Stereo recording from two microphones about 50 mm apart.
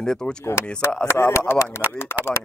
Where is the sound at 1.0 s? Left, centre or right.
Left.